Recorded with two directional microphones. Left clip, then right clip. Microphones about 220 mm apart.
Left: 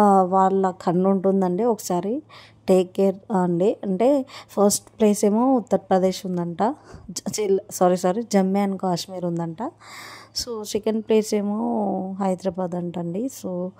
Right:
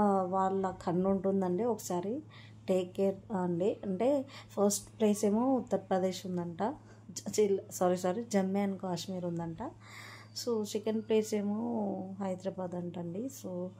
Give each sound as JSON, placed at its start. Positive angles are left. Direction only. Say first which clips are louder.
{"t": 0.0, "sound": "a woman's voice", "louder": "left 13 dB", "side_deg": 40}